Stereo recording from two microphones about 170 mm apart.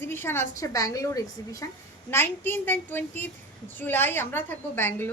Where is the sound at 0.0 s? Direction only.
15° left (ahead or behind).